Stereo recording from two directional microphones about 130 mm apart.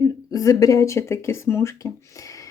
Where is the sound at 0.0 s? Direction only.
25° left (ahead or behind).